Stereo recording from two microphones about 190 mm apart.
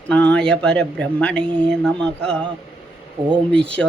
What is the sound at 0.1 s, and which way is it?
Speech, 5° left (ahead or behind).